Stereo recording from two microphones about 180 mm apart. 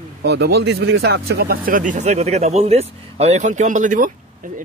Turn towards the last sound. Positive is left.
turn(degrees=-45)  # may be behind; listen again after turning